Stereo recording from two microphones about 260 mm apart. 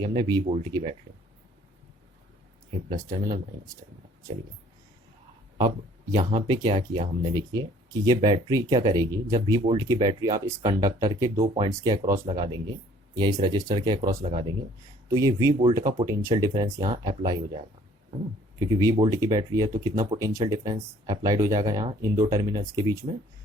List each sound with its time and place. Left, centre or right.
0.0 s speech: centre
5.5 s speech: centre
18.7 s speech: centre